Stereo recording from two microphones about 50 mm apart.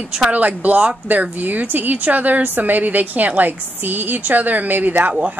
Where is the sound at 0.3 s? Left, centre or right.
Right.